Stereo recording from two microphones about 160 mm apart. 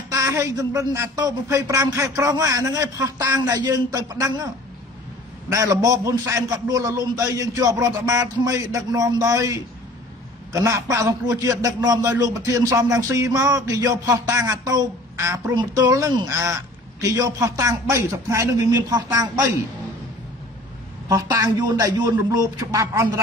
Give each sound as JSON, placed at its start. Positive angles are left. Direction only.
{"t": 0.1, "sound": "a man's voice", "side_deg": -20}
{"t": 5.5, "sound": "a man's voice", "side_deg": -20}
{"t": 21.1, "sound": "a man's voice", "side_deg": -20}